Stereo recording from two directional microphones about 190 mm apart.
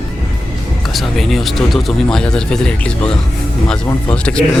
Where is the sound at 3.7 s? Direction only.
5° left (ahead or behind).